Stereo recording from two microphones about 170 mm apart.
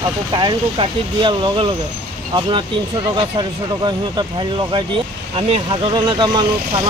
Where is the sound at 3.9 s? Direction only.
25° right (ahead or behind).